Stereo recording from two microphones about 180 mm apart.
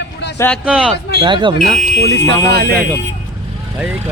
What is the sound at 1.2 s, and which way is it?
Speech, 25° right (ahead or behind).